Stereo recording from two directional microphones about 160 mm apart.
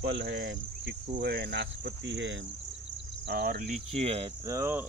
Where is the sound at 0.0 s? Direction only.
90° right.